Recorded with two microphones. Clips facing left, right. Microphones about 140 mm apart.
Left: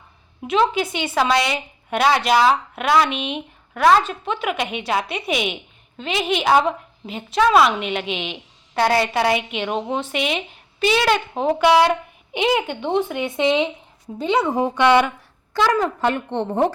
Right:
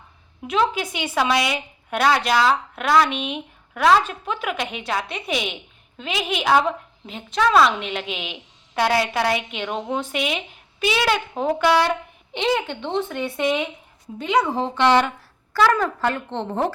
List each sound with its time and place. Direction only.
0.4 s a woman's voice: centre (ahead or behind)
0.9 s a woman's voice: 10° right (ahead or behind); by 16.7 s 15° left (ahead or behind)